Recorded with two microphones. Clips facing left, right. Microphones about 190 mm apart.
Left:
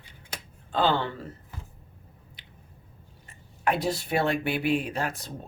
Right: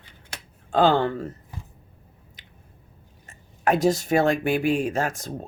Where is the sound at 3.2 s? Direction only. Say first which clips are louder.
Right 4 dB; 45° right (ahead or behind).